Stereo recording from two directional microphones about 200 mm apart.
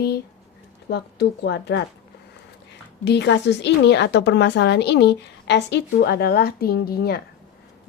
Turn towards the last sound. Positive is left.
turn(degrees=50)  # may be behind; listen again after turning